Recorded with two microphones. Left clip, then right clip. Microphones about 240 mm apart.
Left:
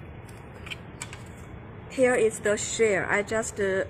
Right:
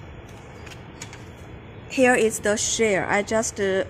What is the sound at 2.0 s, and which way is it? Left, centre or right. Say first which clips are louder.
A woman's voice: right 4 dB; right.